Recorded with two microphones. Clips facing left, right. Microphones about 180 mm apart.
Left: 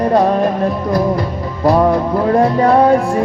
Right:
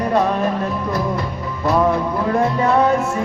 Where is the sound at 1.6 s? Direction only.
35° left (ahead or behind).